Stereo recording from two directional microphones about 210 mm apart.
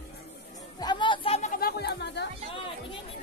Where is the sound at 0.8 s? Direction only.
20° left (ahead or behind); by 2.3 s 55° left (ahead or behind).